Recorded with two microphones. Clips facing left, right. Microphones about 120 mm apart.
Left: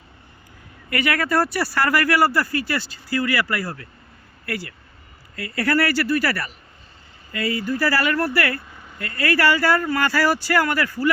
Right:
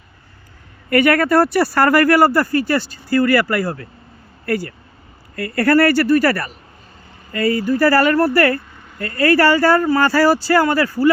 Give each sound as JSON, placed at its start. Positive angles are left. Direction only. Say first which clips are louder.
{"t": 0.9, "sound": "speech", "louder": "right 8 dB", "side_deg": -55}